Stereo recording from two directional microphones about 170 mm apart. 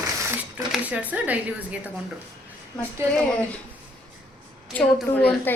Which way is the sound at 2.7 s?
5° left (ahead or behind).